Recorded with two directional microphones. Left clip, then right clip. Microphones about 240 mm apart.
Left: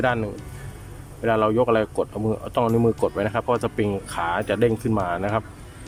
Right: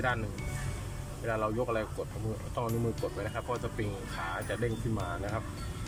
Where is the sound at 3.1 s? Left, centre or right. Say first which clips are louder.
Left 13 dB; left.